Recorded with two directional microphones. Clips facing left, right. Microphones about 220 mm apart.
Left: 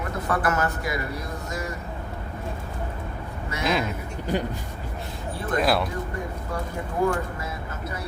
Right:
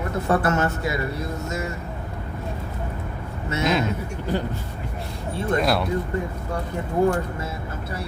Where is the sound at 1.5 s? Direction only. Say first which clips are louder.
Even; 25° right (ahead or behind).